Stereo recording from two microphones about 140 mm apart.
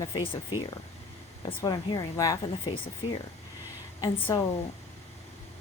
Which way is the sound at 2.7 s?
35° left (ahead or behind).